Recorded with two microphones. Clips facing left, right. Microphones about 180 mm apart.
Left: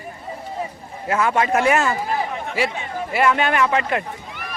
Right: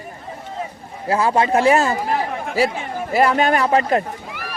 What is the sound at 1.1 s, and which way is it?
A man's voice, 30° right (ahead or behind).